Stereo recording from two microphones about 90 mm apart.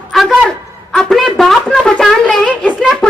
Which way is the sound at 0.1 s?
5° left (ahead or behind).